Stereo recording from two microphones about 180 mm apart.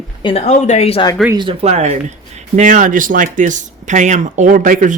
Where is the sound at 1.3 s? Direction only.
25° right (ahead or behind).